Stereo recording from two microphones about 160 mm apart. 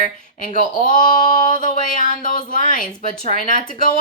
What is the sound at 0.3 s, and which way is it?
Speech, 60° left (ahead or behind).